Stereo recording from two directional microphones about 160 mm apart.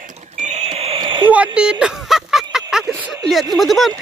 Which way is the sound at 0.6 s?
35° right (ahead or behind).